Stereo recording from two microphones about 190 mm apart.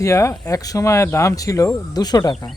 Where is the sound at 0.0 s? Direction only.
15° left (ahead or behind).